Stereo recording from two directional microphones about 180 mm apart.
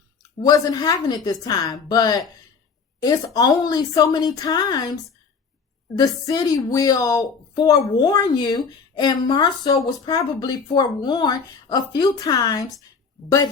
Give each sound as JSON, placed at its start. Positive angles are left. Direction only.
{"t": 0.2, "sound": "a woman's voice", "side_deg": 20}
{"t": 6.0, "sound": "a woman's voice", "side_deg": 20}